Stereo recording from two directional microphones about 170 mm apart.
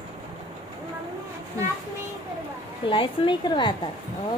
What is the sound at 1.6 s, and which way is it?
Speech, 15° right (ahead or behind).